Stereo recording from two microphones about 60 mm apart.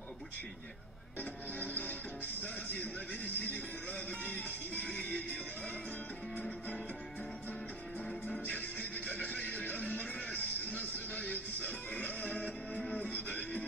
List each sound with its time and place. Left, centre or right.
1.6 s music: left
2.4 s speech: left
8.5 s music: left
12.7 s music: centre
13.0 s music: left